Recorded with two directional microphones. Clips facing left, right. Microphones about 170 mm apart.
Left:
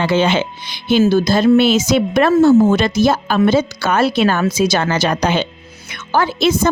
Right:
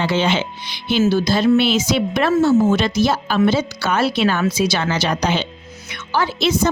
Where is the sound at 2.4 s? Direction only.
60° left (ahead or behind).